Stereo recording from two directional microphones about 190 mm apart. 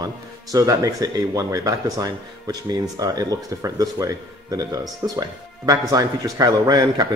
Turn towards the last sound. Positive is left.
turn(degrees=-20)  # may be behind; listen again after turning